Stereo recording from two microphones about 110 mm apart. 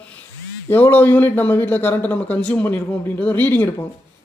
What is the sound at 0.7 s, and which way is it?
A man's voice, 15° left (ahead or behind).